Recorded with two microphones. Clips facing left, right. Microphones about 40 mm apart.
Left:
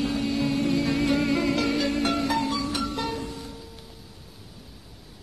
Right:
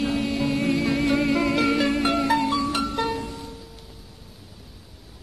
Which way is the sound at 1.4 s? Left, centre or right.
Right.